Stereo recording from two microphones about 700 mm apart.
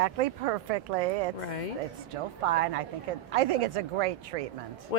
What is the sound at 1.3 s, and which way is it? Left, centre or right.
Speech, left.